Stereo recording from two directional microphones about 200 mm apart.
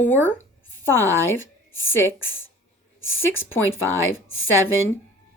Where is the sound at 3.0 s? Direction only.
80° left.